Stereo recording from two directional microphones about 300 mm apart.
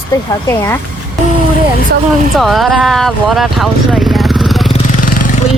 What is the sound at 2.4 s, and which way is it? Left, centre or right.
Speech, centre.